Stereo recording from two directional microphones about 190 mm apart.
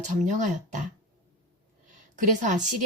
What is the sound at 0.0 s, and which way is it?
Speech, 40° right (ahead or behind).